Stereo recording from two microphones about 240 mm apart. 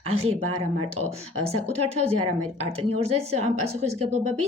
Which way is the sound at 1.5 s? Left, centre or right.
Right.